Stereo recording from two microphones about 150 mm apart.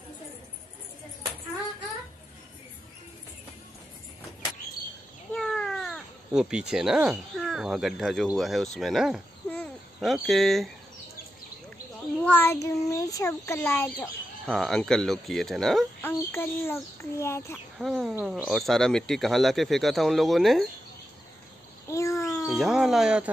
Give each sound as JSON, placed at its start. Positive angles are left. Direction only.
{"t": 5.3, "sound": "cat", "side_deg": 5}
{"t": 8.4, "sound": "speech", "side_deg": 0}
{"t": 12.2, "sound": "a child's voice", "side_deg": 15}
{"t": 14.4, "sound": "speech", "side_deg": 0}
{"t": 16.0, "sound": "a child's voice", "side_deg": 15}
{"t": 17.7, "sound": "speech", "side_deg": 0}
{"t": 21.8, "sound": "a sound", "side_deg": 20}
{"t": 22.5, "sound": "speech", "side_deg": 0}